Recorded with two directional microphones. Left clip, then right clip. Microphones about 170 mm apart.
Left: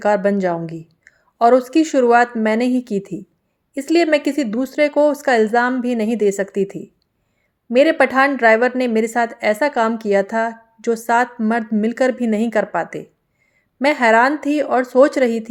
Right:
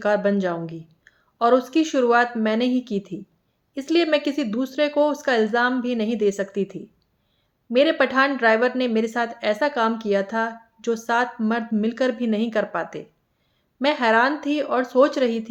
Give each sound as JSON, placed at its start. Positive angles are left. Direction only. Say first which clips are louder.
{"t": 0.0, "sound": "a woman's voice", "louder": "left 4 dB", "side_deg": 35}